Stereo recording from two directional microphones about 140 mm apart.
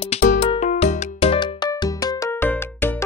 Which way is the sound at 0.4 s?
55° left (ahead or behind).